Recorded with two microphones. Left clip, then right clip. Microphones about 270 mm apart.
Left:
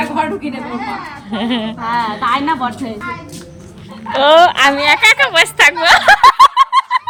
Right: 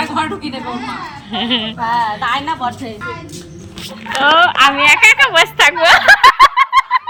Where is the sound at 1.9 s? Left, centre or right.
Right.